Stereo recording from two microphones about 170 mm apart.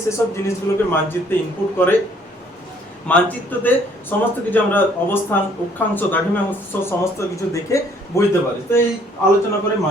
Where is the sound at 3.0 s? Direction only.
10° left (ahead or behind).